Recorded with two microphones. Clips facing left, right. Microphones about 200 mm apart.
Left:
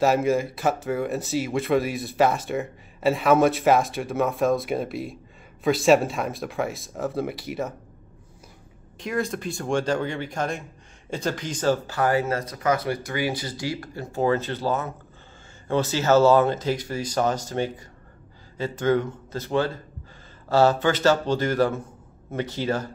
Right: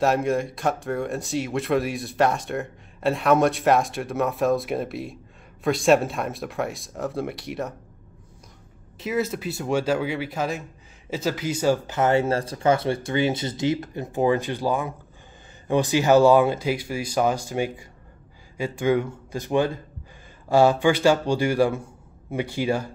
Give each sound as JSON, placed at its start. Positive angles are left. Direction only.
{"t": 0.0, "sound": "speech", "side_deg": 0}
{"t": 8.9, "sound": "speech", "side_deg": -5}